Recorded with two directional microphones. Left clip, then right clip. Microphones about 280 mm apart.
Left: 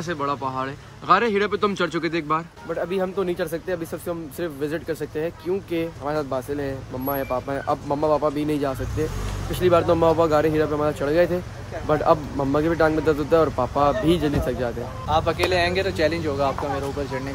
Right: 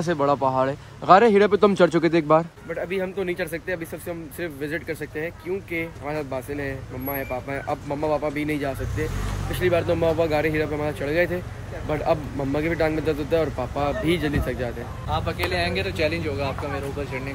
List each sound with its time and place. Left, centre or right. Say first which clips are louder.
0.0 s speech: right 5 dB; centre
2.7 s speech: left 3 dB; centre
15.0 s speech: left 5 dB; left